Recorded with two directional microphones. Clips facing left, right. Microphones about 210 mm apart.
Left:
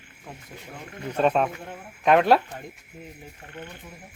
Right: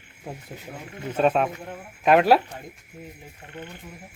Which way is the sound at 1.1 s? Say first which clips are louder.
Right 1 dB; 5° right (ahead or behind).